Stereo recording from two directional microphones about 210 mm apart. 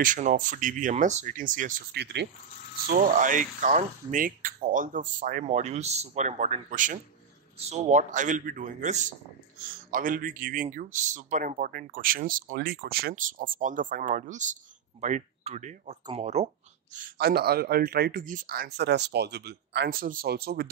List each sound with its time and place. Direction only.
0.0 s speech: 35° right (ahead or behind)
3.2 s speech: 40° right (ahead or behind)
16.9 s speech: 45° right (ahead or behind)